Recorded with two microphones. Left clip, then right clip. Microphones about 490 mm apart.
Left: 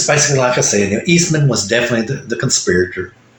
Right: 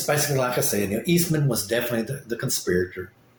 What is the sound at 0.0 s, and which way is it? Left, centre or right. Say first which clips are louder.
Speech: left 10 dB; right.